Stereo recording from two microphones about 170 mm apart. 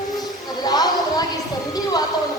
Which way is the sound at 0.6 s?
25° left (ahead or behind).